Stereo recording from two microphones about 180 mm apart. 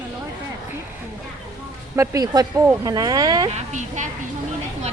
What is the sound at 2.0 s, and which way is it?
Speech, 20° right (ahead or behind).